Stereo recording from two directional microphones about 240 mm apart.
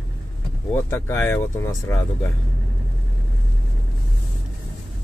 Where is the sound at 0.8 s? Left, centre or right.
Centre.